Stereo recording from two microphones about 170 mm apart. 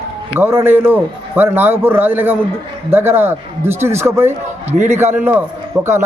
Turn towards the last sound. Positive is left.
turn(degrees=-15)  # may be behind; listen again after turning